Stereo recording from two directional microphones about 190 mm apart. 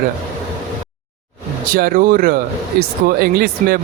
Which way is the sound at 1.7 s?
50° right (ahead or behind).